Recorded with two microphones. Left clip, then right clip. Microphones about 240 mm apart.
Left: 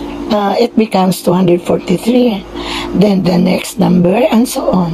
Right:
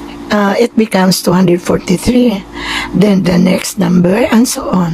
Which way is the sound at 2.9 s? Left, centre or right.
Centre.